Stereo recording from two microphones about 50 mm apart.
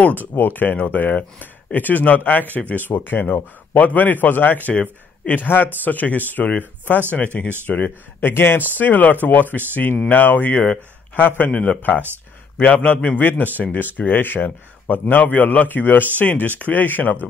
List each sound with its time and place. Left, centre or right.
0.4 s speech: left
8.3 s speech: left
8.7 s a man's voice: left
13.6 s speech: left